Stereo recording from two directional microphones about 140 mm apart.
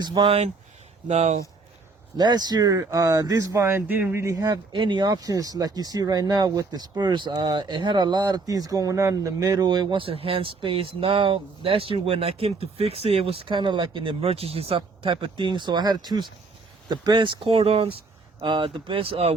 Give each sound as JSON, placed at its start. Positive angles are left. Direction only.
{"t": 0.0, "sound": "speech", "side_deg": -35}
{"t": 2.1, "sound": "speech", "side_deg": -30}